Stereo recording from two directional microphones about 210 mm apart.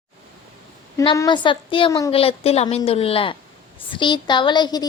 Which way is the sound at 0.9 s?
15° left (ahead or behind).